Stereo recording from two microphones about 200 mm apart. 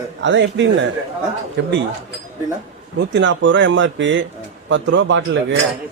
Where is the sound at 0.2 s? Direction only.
65° right (ahead or behind).